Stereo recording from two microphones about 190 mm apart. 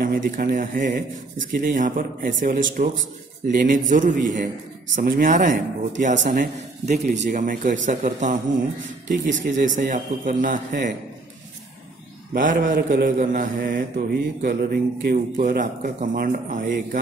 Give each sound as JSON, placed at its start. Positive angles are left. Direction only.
{"t": 0.0, "sound": "mantra", "side_deg": -45}
{"t": 12.4, "sound": "mantra", "side_deg": -45}